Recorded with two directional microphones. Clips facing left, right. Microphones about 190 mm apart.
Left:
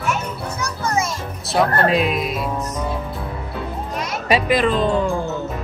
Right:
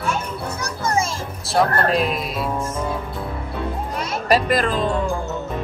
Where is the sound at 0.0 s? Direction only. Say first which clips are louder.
Left 1 dB; 30° right (ahead or behind).